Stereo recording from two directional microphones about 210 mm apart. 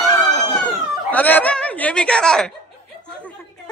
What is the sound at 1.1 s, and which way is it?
Speech, 5° left (ahead or behind).